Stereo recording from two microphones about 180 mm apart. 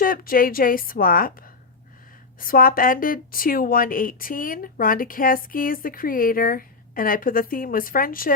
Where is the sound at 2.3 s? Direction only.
50° left (ahead or behind).